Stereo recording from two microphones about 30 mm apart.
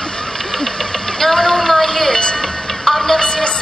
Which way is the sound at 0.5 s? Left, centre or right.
Centre.